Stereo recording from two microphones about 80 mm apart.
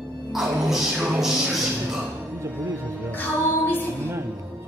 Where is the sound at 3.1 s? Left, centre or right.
Left.